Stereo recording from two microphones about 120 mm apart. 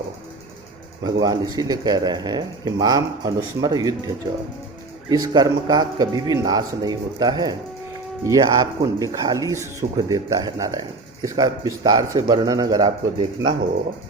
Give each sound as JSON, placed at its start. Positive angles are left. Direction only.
{"t": 1.0, "sound": "speech", "side_deg": -35}
{"t": 5.0, "sound": "speech", "side_deg": -35}